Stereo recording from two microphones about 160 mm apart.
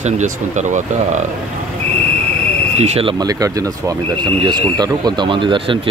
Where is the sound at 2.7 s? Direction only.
40° right (ahead or behind).